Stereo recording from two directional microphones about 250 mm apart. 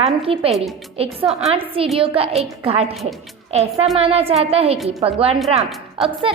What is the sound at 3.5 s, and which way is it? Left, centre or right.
A woman's voice, right.